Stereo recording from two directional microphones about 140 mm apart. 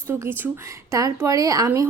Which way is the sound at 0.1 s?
15° right (ahead or behind).